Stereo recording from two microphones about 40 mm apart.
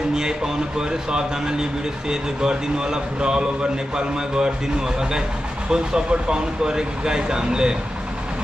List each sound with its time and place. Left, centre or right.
0.1 s speech: centre
5.7 s speech: centre